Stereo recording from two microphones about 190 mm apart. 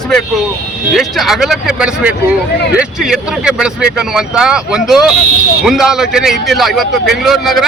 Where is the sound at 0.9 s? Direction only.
Centre (ahead or behind).